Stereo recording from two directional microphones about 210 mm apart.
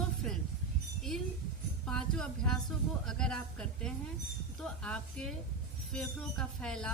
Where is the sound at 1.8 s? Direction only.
5° left (ahead or behind).